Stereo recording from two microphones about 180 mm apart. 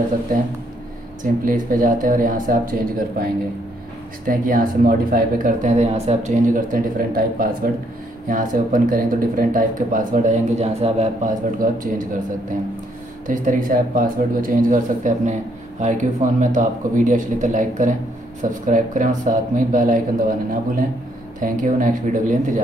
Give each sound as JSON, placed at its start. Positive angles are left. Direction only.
{"t": 1.2, "sound": "speech", "side_deg": -50}
{"t": 4.3, "sound": "speech", "side_deg": -50}
{"t": 11.5, "sound": "speech", "side_deg": -50}
{"t": 13.3, "sound": "speech", "side_deg": -45}